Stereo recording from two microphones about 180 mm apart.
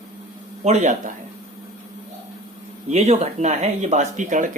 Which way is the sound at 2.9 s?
35° right (ahead or behind).